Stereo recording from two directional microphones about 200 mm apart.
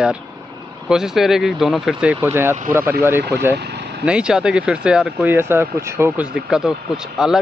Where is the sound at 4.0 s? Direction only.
5° right (ahead or behind).